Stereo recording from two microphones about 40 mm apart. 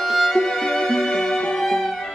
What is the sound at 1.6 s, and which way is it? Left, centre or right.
Music, centre.